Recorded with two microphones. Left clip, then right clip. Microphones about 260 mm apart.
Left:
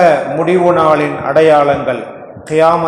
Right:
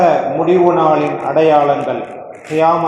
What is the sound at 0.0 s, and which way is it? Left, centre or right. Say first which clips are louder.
A man's voice: left 2 dB; left.